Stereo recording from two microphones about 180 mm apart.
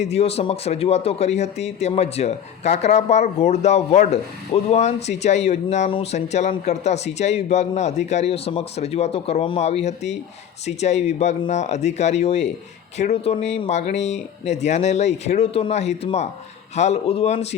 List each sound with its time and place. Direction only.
0.0 s speech: 35° left (ahead or behind)